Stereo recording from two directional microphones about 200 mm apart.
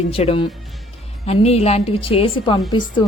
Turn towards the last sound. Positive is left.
turn(degrees=25)  # may be behind; listen again after turning